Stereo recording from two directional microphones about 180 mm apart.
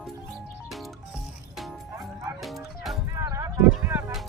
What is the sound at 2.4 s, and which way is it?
Bow-wow, centre (ahead or behind).